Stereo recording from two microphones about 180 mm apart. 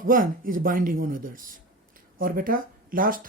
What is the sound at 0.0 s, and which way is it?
Speech, 50° right (ahead or behind).